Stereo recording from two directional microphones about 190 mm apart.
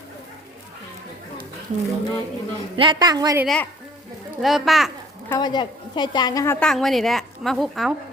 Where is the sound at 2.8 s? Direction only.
25° right (ahead or behind).